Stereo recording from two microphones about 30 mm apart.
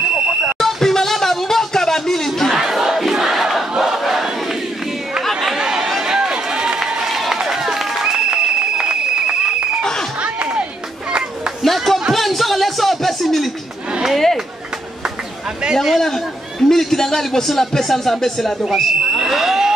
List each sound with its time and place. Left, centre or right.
0.6 s music: centre
2.7 s battle cry: centre
5.2 s chatter: centre
5.6 s chatter: centre
6.0 s run: centre
7.1 s run: centre
7.5 s music: centre
8.0 s applause: right
11.6 s a sound: centre
15.7 s a sound: centre
16.6 s a sound: centre
17.5 s speech: centre
19.2 s fire alarm: centre